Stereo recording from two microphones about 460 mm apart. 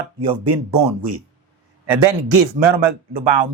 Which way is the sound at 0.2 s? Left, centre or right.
Right.